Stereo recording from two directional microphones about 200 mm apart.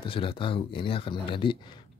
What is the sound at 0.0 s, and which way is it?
Speech, 25° left (ahead or behind).